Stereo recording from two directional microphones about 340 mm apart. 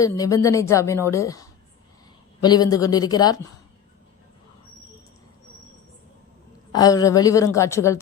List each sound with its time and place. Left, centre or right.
0.0 s a woman's voice: centre
6.7 s a woman's voice: centre